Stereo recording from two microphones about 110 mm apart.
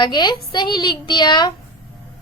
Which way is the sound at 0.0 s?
40° left (ahead or behind).